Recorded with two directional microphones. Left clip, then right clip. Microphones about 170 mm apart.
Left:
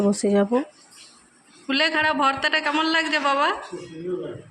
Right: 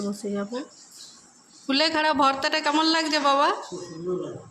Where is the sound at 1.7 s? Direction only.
10° right (ahead or behind).